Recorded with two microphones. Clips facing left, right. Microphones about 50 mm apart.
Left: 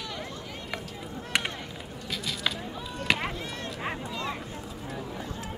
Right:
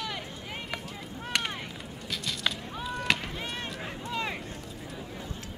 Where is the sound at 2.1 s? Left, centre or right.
Centre.